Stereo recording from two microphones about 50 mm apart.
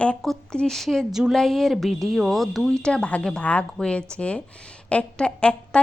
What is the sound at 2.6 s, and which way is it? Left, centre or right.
A woman's voice, centre.